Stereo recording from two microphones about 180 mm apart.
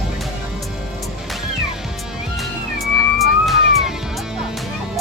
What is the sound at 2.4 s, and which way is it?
Music, centre (ahead or behind).